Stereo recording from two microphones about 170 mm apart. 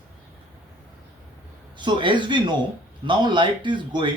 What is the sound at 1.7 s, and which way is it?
Speech, 30° right (ahead or behind).